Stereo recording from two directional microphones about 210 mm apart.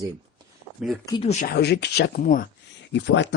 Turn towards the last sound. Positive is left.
turn(degrees=60)  # may be behind; listen again after turning